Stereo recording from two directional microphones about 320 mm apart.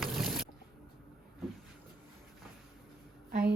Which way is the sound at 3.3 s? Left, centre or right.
Right.